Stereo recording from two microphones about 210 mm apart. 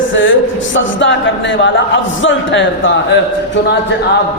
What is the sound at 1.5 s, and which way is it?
A man's voice, 60° left (ahead or behind).